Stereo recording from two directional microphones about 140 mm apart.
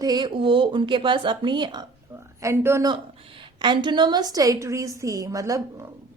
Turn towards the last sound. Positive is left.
turn(degrees=-25)  # may be behind; listen again after turning